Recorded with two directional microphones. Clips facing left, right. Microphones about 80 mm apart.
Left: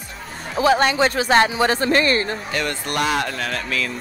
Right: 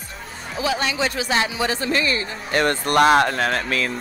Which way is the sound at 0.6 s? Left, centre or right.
Left.